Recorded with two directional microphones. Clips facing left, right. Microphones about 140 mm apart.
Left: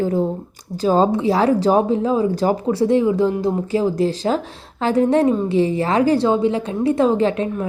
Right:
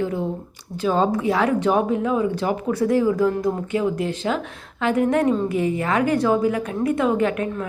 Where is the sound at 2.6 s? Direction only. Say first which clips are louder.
Left 1 dB; 25° left (ahead or behind).